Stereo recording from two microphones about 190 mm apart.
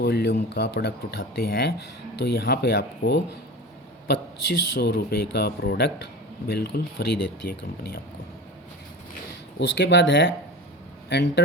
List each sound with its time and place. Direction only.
0.0 s speech: 60° left (ahead or behind)
4.8 s speech: 60° left (ahead or behind)
9.6 s speech: 65° left (ahead or behind)